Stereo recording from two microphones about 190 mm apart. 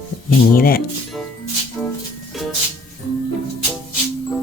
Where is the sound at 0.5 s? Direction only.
50° left (ahead or behind).